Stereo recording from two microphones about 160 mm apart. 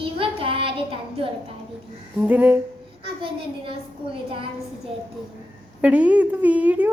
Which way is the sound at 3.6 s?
35° right (ahead or behind).